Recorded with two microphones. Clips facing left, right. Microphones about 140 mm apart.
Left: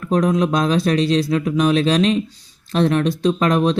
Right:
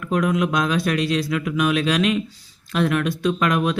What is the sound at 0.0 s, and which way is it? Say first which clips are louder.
Speech: left 3 dB; 35° left (ahead or behind).